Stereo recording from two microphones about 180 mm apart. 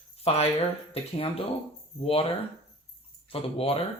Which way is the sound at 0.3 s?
35° left (ahead or behind).